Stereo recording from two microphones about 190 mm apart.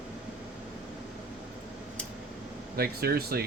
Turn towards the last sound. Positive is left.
turn(degrees=-55)  # may be behind; listen again after turning